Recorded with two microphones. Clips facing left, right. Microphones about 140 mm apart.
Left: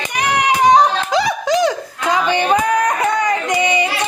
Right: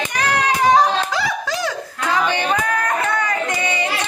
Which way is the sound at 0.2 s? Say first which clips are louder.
Left 3 dB; 15° left (ahead or behind).